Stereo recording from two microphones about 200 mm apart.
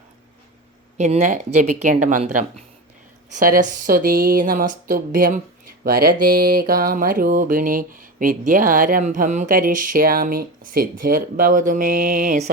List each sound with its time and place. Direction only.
0.9 s speech: 35° right (ahead or behind)